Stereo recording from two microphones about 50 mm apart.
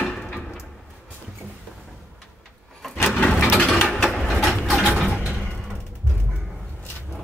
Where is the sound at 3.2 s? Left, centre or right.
Left.